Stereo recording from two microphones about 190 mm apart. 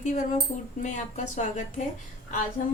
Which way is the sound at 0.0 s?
40° left (ahead or behind).